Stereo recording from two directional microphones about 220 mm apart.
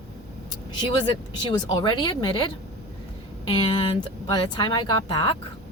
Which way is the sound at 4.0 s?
20° left (ahead or behind).